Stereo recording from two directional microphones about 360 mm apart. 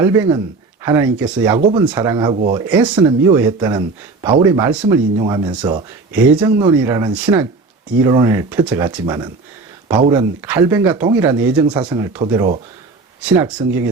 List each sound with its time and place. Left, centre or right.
0.0 s speech: centre
1.5 s speech: centre